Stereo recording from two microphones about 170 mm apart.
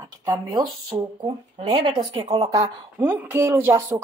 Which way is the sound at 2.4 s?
20° right (ahead or behind).